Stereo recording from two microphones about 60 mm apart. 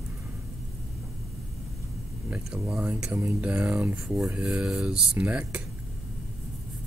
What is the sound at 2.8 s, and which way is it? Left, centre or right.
Speech, right.